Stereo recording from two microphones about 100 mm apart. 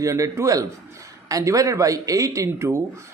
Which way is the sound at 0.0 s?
30° right (ahead or behind).